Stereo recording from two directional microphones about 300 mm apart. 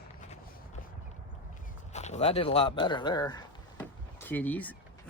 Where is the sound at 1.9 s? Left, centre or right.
Left.